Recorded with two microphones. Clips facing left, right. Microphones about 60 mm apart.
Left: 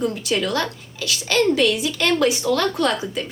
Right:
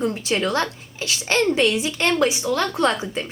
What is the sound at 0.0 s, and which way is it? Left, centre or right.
A child's voice, right.